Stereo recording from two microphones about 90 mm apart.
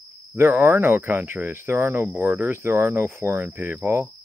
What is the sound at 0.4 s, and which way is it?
Speech, 20° right (ahead or behind).